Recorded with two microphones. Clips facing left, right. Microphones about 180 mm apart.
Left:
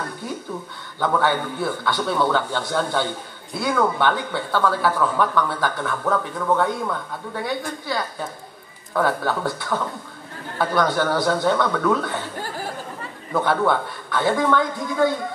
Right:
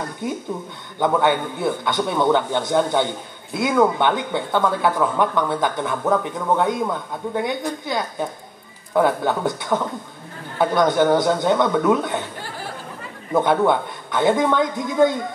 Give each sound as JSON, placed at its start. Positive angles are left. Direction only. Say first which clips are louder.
{"t": 0.2, "sound": "speech", "louder": "right 4 dB", "side_deg": -20}
{"t": 13.3, "sound": "speech", "louder": "right 3 dB", "side_deg": -20}